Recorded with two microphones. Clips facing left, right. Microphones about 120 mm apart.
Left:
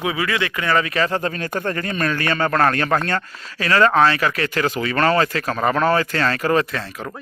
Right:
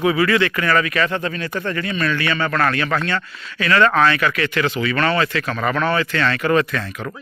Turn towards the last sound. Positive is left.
turn(degrees=30)  # may be behind; listen again after turning